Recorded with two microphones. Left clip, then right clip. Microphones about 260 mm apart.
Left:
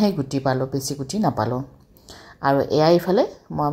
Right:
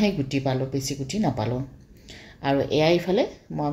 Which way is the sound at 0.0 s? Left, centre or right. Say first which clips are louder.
Left 3 dB; centre.